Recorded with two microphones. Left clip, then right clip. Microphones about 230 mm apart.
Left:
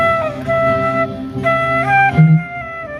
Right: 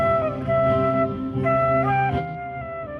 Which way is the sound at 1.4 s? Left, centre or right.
Left.